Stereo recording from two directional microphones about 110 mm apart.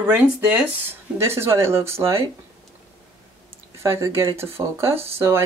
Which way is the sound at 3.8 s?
25° right (ahead or behind).